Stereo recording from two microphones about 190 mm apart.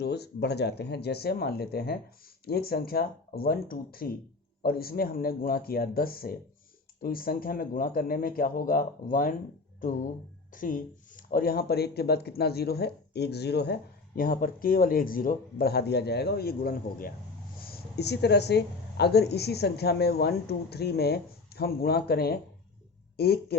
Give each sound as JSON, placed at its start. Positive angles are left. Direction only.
{"t": 0.0, "sound": "speech", "side_deg": 60}
{"t": 10.5, "sound": "speech", "side_deg": 45}
{"t": 14.2, "sound": "speech", "side_deg": 50}